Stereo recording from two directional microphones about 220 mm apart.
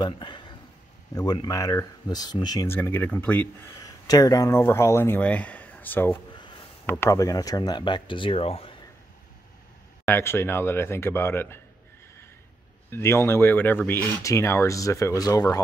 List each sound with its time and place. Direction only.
0.0 s speech: 20° left (ahead or behind)
10.0 s speech: 10° left (ahead or behind)
12.9 s speech: 10° left (ahead or behind)